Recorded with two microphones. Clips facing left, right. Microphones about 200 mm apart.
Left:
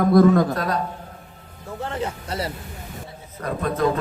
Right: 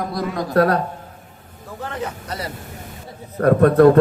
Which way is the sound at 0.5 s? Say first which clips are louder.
Right 9 dB; 60° right (ahead or behind).